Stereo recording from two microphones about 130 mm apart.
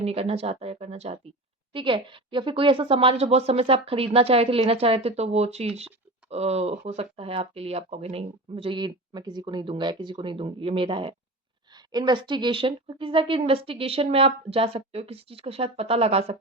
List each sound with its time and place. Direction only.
0.0 s a woman's voice: 50° right (ahead or behind)
1.7 s a woman's voice: 40° right (ahead or behind)